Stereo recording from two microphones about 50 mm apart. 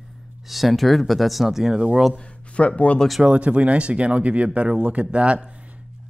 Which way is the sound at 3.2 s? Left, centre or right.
Right.